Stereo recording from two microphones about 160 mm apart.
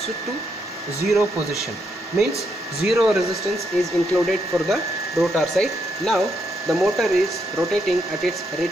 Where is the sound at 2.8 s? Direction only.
Centre (ahead or behind).